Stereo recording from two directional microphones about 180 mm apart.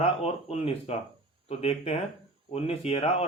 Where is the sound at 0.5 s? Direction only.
35° left (ahead or behind).